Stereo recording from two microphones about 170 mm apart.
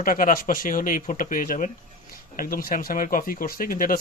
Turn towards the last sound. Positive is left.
turn(degrees=55)  # may be behind; listen again after turning